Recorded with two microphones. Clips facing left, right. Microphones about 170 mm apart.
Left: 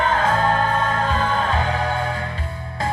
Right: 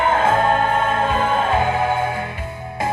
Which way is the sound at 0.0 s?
25° right (ahead or behind).